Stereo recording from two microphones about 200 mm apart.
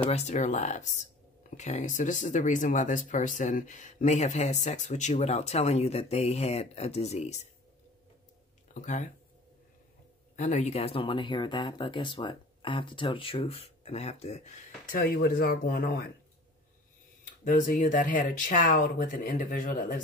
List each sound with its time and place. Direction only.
0.1 s speech: 35° left (ahead or behind)
8.7 s speech: 35° left (ahead or behind)
10.3 s speech: 35° left (ahead or behind)
17.5 s speech: 40° left (ahead or behind)